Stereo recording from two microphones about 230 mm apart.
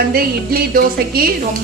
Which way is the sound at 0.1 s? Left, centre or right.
Right.